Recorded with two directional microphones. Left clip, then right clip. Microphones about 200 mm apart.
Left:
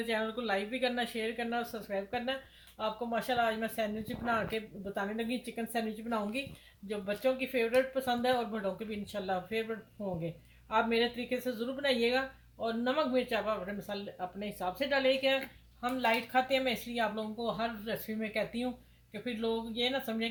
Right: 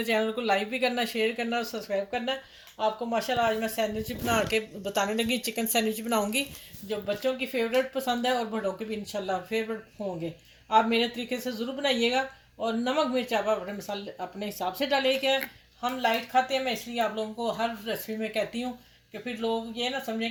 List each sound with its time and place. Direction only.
0.0 s speech: 35° right (ahead or behind)
10.7 s speech: 30° right (ahead or behind)
15.8 s speech: 25° right (ahead or behind)